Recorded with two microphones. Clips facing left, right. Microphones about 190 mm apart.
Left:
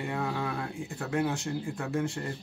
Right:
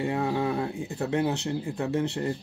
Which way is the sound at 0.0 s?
25° right (ahead or behind).